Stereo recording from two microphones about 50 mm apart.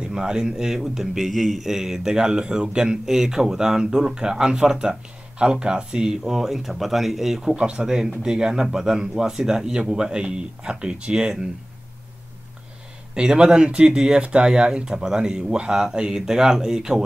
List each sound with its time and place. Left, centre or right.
0.0 s a man's voice: centre
7.5 s a man's voice: centre
13.1 s a man's voice: centre